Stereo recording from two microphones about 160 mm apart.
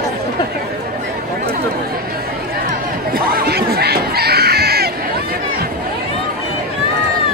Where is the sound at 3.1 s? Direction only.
70° right (ahead or behind).